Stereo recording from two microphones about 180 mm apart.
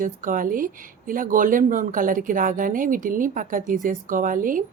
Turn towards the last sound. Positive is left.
turn(degrees=-50)  # may be behind; listen again after turning